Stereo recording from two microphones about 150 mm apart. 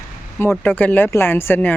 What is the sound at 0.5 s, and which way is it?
Speech, 10° left (ahead or behind).